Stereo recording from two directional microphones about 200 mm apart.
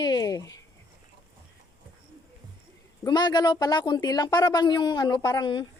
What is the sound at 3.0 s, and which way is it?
A woman's voice, 20° left (ahead or behind).